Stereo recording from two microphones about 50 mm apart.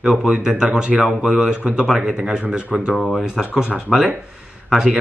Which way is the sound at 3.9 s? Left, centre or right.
Centre.